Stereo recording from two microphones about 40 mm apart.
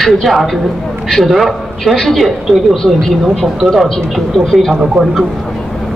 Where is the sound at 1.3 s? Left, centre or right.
Centre.